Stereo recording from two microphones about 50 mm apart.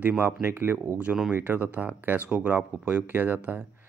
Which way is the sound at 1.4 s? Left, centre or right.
Right.